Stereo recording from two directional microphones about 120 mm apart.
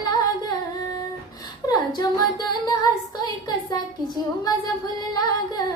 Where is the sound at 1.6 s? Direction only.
35° left (ahead or behind).